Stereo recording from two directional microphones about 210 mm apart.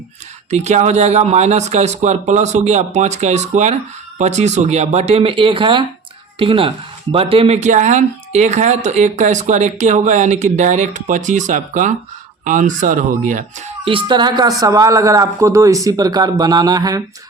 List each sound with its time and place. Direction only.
0.5 s speech: 35° right (ahead or behind); by 17.0 s 20° right (ahead or behind)